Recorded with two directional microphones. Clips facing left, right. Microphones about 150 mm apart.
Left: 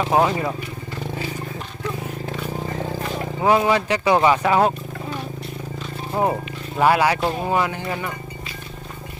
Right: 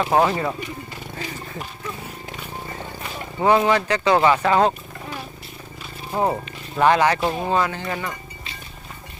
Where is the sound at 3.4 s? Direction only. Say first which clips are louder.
Even; 10° left (ahead or behind).